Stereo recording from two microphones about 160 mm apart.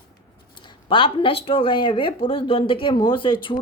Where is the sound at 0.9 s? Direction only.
30° left (ahead or behind).